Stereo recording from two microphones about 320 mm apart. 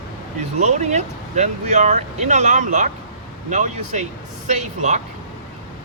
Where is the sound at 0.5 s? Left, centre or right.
Right.